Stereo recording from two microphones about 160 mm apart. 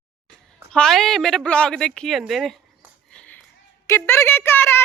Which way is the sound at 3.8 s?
15° left (ahead or behind).